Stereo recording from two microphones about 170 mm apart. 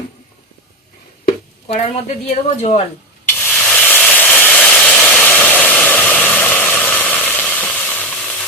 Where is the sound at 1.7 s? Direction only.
40° left (ahead or behind).